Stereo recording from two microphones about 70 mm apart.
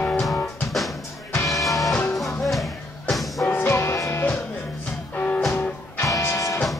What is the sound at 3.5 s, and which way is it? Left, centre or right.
Music, left.